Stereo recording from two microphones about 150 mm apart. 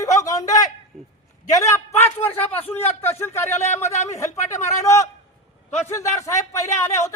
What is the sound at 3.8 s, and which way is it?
Speech, 50° left (ahead or behind).